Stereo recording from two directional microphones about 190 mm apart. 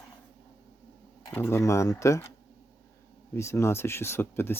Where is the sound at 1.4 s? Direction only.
10° left (ahead or behind).